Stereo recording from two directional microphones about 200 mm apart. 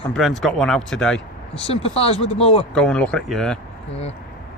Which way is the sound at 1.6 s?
30° left (ahead or behind).